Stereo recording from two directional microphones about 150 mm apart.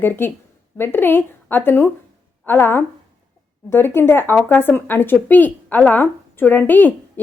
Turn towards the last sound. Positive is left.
turn(degrees=10)  # may be behind; listen again after turning